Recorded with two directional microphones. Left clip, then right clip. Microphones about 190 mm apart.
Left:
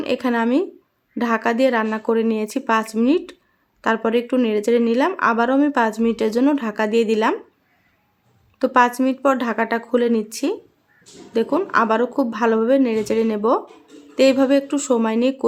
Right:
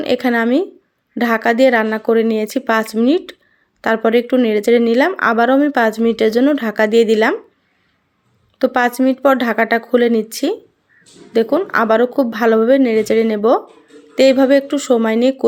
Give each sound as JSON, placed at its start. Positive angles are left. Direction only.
{"t": 0.0, "sound": "speech", "side_deg": -20}
{"t": 8.5, "sound": "speech", "side_deg": -20}